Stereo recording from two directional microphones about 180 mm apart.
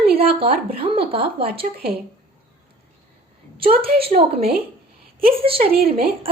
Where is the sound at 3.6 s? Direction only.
30° right (ahead or behind).